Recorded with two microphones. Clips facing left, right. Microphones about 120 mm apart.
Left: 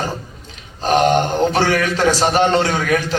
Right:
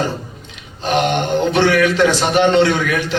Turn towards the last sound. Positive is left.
turn(degrees=35)  # may be behind; listen again after turning